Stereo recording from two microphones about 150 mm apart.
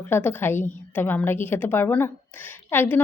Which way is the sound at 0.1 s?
15° left (ahead or behind).